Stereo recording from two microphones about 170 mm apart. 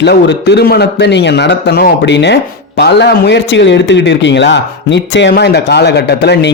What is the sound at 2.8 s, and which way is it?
A man's voice, 75° left (ahead or behind).